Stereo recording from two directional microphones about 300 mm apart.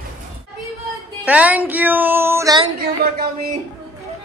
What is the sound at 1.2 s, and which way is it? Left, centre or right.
Speech, centre.